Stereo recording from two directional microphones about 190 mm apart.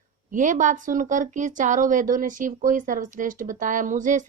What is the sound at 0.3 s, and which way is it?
Speech, 45° right (ahead or behind).